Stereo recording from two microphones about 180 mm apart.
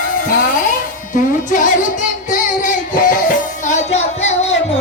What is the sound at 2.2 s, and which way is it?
Child singing, 45° left (ahead or behind).